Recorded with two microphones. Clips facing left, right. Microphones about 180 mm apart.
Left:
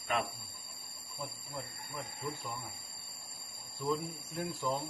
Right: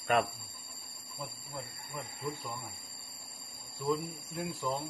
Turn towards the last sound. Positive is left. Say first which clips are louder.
# even
turn(degrees=0)  # may be behind; listen again after turning